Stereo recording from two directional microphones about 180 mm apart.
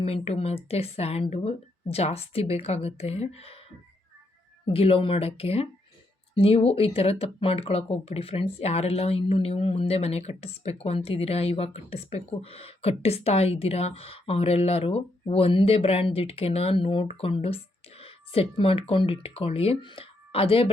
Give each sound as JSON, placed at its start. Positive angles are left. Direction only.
{"t": 0.0, "sound": "speech", "side_deg": 35}
{"t": 4.6, "sound": "speech", "side_deg": 30}